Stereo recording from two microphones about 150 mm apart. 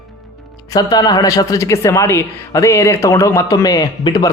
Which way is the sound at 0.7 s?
25° left (ahead or behind).